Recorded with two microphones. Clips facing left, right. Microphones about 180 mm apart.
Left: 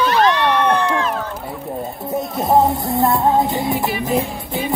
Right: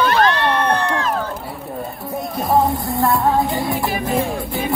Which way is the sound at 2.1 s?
20° left (ahead or behind).